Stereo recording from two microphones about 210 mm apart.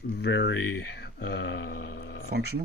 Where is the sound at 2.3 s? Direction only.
50° right (ahead or behind).